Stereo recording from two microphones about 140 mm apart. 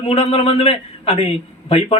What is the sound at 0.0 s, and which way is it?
A man's voice, 45° left (ahead or behind).